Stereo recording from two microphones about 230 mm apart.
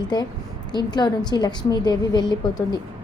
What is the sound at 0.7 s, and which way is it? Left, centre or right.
A woman's voice, centre.